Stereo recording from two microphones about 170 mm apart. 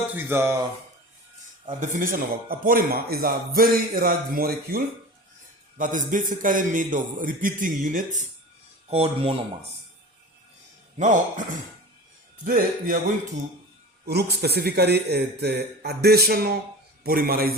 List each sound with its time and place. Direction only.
0.1 s speech: 10° right (ahead or behind)
1.8 s a man's voice: 55° right (ahead or behind)
8.9 s speech: 35° right (ahead or behind)
10.9 s a man's voice: 50° right (ahead or behind)
12.5 s speech: 55° right (ahead or behind)
14.1 s a man's voice: 70° right (ahead or behind)